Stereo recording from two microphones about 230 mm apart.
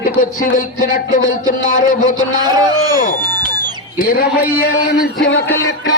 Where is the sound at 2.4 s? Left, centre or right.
Centre.